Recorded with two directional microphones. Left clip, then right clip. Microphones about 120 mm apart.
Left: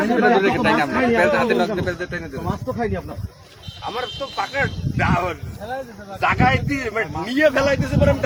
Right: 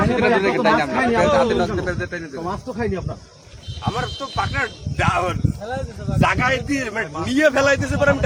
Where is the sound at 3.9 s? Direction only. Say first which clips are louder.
Even; 30° right (ahead or behind).